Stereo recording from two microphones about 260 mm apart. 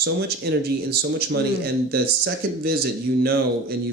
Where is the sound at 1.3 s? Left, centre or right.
Right.